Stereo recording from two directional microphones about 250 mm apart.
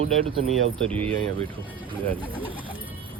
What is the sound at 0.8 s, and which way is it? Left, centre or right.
Speech, centre.